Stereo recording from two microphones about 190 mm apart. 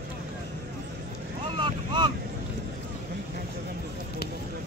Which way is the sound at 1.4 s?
25° right (ahead or behind).